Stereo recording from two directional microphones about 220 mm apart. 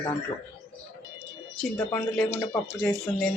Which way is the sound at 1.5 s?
5° left (ahead or behind).